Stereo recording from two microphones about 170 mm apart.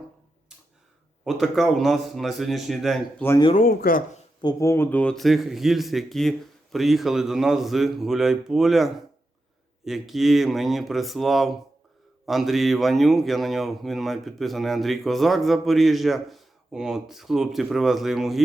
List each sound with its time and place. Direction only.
1.2 s speech: centre (ahead or behind)
3.5 s speech: 55° left (ahead or behind)
4.4 s speech: 20° left (ahead or behind); by 18.4 s centre (ahead or behind)